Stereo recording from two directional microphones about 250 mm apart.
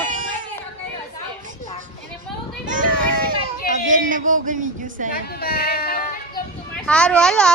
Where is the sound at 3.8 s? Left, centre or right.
Right.